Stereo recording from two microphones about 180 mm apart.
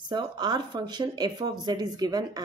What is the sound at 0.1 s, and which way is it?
A woman's voice, 25° right (ahead or behind).